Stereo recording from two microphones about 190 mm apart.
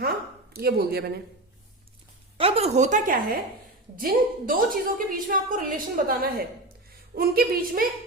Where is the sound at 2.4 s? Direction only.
30° right (ahead or behind).